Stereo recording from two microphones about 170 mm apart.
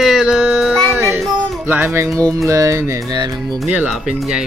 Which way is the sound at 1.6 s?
10° right (ahead or behind).